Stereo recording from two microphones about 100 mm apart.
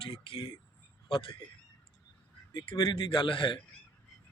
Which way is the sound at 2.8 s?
55° left (ahead or behind).